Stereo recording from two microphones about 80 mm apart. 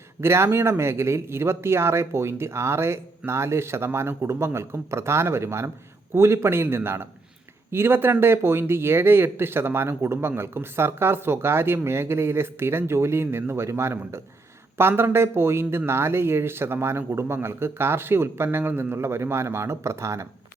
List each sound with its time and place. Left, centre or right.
0.2 s speech: right